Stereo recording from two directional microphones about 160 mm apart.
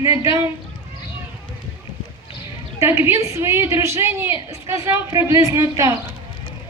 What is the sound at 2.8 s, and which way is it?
A woman's voice, 15° right (ahead or behind).